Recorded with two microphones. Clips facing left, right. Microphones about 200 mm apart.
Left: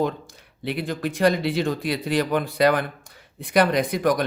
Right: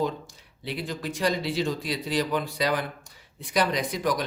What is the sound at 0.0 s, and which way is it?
Speech, 60° left (ahead or behind).